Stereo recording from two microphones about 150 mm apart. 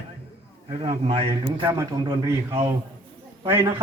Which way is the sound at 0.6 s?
40° right (ahead or behind).